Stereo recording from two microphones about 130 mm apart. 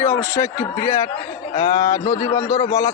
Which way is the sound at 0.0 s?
20° left (ahead or behind).